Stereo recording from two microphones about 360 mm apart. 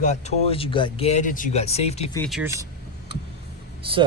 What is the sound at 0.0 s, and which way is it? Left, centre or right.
Speech, centre.